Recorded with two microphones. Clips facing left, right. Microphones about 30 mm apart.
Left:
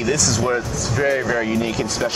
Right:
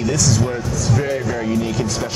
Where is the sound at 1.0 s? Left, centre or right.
Centre.